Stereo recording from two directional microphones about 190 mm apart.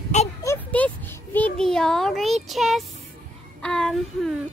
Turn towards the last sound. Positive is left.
turn(degrees=0)  # may be behind; listen again after turning